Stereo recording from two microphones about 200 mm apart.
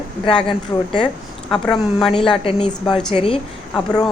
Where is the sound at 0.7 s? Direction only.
15° left (ahead or behind).